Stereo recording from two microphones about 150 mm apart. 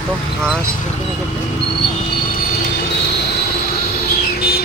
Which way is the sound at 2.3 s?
85° left.